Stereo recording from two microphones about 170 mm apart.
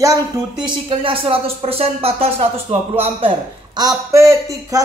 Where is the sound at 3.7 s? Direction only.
20° right (ahead or behind).